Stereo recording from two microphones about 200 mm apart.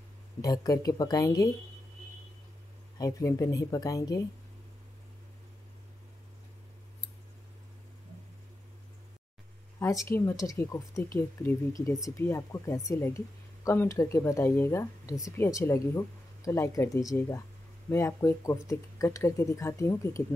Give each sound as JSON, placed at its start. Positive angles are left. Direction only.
{"t": 0.4, "sound": "speech", "side_deg": 20}
{"t": 3.0, "sound": "speech", "side_deg": 15}
{"t": 9.8, "sound": "speech", "side_deg": 15}